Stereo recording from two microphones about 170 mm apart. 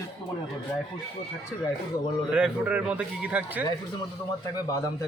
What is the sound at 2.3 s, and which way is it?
A man's voice, 5° right (ahead or behind).